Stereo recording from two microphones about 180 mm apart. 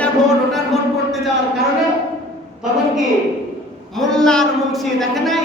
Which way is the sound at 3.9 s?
5° left (ahead or behind).